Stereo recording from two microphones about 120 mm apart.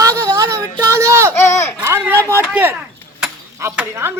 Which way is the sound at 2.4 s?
15° right (ahead or behind).